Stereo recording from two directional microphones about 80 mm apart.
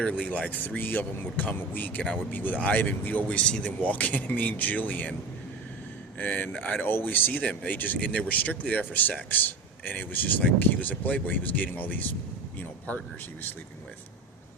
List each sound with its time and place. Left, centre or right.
0.3 s speech: centre
6.1 s speech: centre